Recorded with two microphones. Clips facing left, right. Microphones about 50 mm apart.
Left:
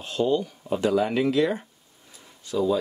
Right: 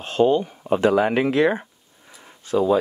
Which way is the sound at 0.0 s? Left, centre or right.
Right.